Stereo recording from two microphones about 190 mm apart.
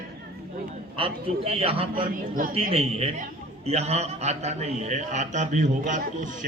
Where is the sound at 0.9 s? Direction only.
30° right (ahead or behind).